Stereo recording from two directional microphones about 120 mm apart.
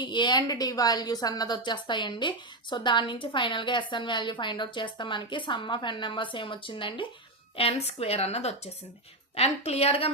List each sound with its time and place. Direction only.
0.0 s a woman's voice: 40° left (ahead or behind)